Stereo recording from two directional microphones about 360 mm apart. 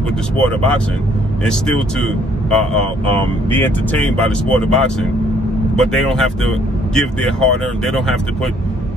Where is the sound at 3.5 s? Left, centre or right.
Centre.